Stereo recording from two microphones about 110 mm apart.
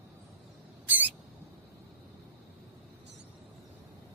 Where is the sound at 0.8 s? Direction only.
15° right (ahead or behind).